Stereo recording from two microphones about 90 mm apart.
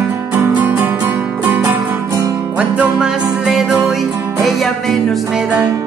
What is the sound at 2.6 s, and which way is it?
Music, 10° right (ahead or behind).